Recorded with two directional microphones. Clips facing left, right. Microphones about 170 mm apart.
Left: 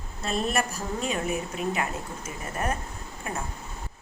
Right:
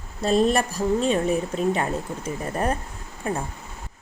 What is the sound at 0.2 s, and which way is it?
A woman's voice, 35° right (ahead or behind).